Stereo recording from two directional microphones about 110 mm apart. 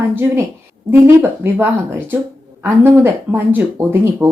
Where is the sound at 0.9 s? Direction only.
20° right (ahead or behind).